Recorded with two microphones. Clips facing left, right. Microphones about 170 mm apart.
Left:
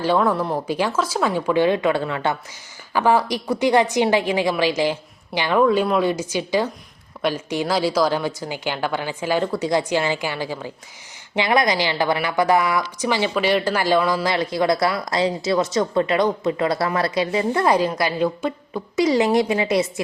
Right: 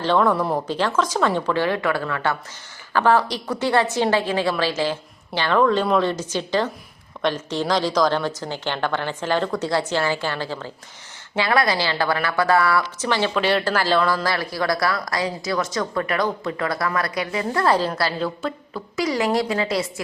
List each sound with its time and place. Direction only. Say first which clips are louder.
0.0 s a woman's voice: even; 5° left (ahead or behind)